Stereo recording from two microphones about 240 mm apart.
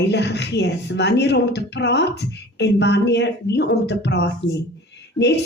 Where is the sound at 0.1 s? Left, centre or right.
Left.